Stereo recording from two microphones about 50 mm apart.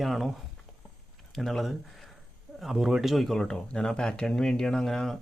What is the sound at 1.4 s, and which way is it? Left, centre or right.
Speech, centre.